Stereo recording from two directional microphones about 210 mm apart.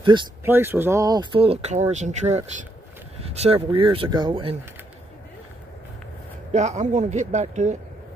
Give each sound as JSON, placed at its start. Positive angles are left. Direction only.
{"t": 0.1, "sound": "speech", "side_deg": -20}
{"t": 0.5, "sound": "speech", "side_deg": -10}
{"t": 6.5, "sound": "a man's voice", "side_deg": -35}